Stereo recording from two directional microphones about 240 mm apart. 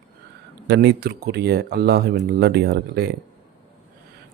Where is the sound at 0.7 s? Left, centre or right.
Right.